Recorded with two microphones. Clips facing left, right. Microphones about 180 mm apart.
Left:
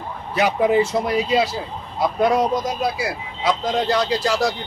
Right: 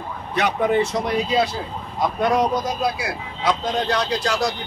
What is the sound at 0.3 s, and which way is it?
Speech, 5° left (ahead or behind).